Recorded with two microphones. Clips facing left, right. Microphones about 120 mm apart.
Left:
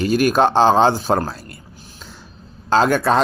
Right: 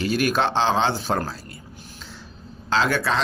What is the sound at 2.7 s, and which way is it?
Speech, 45° left (ahead or behind).